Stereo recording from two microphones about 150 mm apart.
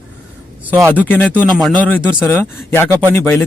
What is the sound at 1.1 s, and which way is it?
Speech, 10° left (ahead or behind).